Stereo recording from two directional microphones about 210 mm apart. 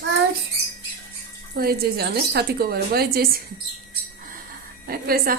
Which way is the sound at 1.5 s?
45° right (ahead or behind).